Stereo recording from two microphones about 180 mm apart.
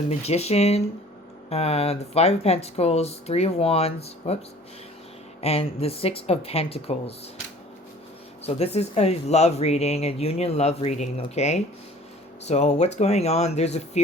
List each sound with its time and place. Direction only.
0.1 s speech: 35° left (ahead or behind)
5.4 s speech: 35° left (ahead or behind)
8.4 s speech: 35° left (ahead or behind)